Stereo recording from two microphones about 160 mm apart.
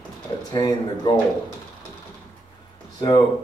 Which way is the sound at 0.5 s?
25° left (ahead or behind).